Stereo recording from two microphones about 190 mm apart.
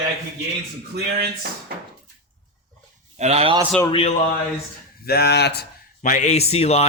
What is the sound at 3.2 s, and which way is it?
Speech, 35° right (ahead or behind).